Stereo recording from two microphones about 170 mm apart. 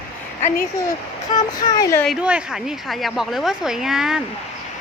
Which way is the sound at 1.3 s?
20° left (ahead or behind).